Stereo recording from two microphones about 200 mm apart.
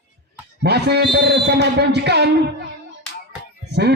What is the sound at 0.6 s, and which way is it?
A man's voice, 55° right (ahead or behind).